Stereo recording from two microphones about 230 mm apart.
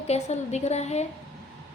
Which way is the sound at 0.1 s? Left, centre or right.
Left.